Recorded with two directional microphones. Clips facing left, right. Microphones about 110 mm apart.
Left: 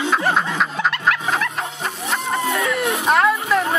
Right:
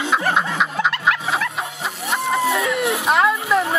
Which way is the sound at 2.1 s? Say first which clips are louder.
Right 3 dB; 15° right (ahead or behind).